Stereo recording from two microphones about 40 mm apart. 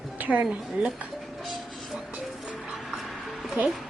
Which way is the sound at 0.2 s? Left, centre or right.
Right.